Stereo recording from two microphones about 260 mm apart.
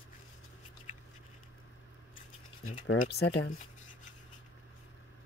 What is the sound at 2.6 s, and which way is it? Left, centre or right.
Speech, left.